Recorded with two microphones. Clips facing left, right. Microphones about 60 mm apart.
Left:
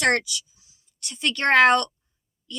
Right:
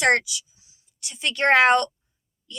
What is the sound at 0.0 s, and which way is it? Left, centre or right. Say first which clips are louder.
A woman's voice: right 2 dB; centre.